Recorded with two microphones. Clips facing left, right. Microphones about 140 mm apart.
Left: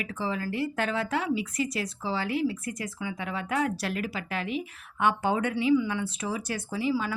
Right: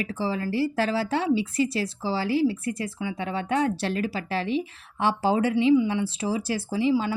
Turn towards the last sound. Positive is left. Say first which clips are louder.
# right 5 dB
turn(degrees=-25)  # may be behind; listen again after turning